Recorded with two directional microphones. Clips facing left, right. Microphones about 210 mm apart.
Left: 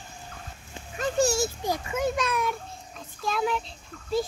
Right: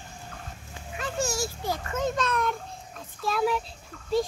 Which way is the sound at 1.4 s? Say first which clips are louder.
Left 3 dB; 15° left (ahead or behind).